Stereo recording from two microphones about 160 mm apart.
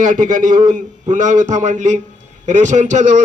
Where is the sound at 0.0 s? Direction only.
50° right (ahead or behind).